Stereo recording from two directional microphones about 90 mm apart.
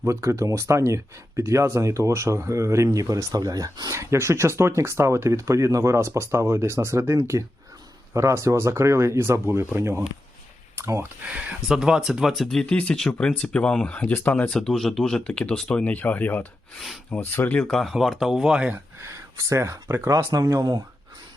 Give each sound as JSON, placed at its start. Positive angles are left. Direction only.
{"t": 0.0, "sound": "speech", "side_deg": -30}
{"t": 10.8, "sound": "a sound", "side_deg": -30}
{"t": 11.3, "sound": "speech", "side_deg": -15}
{"t": 14.6, "sound": "speech", "side_deg": 5}
{"t": 16.7, "sound": "speech", "side_deg": 0}
{"t": 17.2, "sound": "speech", "side_deg": 25}
{"t": 17.7, "sound": "speech", "side_deg": 0}
{"t": 18.7, "sound": "speech", "side_deg": -30}